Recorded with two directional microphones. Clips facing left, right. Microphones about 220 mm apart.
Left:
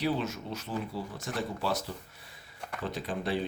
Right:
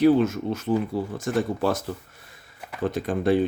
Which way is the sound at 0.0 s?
50° right (ahead or behind).